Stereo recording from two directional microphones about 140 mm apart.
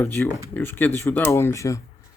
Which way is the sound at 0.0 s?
15° left (ahead or behind).